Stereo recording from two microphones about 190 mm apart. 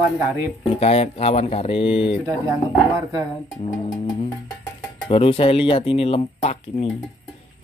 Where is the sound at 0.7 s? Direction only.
35° left (ahead or behind).